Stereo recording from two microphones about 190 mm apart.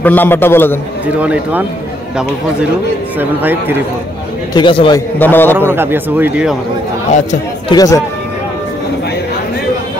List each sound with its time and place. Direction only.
0.0 s a man's voice: 10° left (ahead or behind)
1.0 s speech: 5° right (ahead or behind)
3.2 s speech: 10° right (ahead or behind)
4.6 s a man's voice: 25° left (ahead or behind)
5.2 s a man's voice: 10° left (ahead or behind)
5.7 s speech: 10° right (ahead or behind)
7.1 s speech: 40° left (ahead or behind)
7.7 s a man's voice: 20° left (ahead or behind)